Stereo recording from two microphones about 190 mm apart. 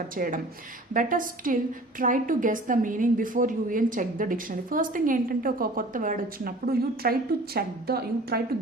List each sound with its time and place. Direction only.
0.2 s a woman's voice: 50° right (ahead or behind)